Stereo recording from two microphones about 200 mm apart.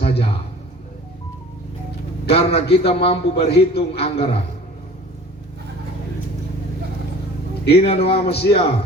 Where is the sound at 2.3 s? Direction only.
30° left (ahead or behind).